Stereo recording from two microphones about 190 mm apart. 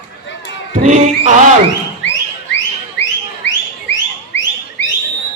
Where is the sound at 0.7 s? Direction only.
40° right (ahead or behind).